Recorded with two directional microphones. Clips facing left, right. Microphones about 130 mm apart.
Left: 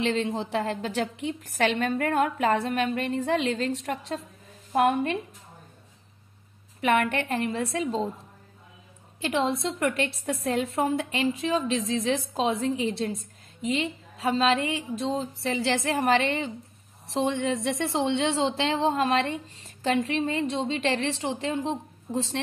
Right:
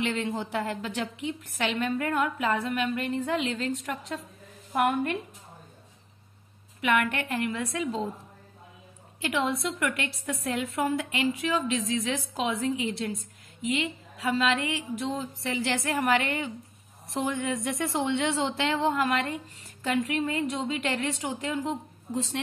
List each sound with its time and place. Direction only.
0.0 s a woman's voice: 30° left (ahead or behind)
6.8 s a woman's voice: 35° left (ahead or behind)
9.2 s a woman's voice: 25° left (ahead or behind)